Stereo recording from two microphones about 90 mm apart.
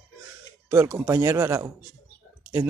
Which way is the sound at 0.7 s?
25° right (ahead or behind).